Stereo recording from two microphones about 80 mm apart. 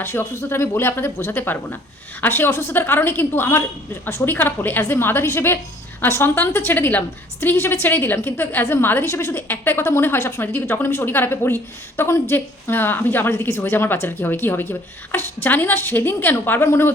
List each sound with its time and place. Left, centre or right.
0.0 s a woman's voice: left